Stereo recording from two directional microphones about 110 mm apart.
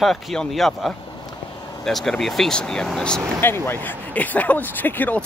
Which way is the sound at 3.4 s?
20° left (ahead or behind).